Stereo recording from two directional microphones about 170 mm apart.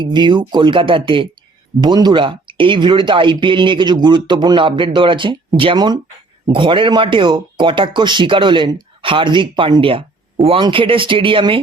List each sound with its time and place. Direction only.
0.0 s speech: 25° right (ahead or behind)